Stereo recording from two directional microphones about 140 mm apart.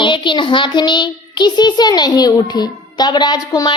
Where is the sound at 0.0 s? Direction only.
35° left (ahead or behind).